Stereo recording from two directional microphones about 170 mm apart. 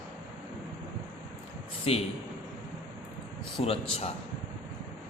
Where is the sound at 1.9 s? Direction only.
35° left (ahead or behind).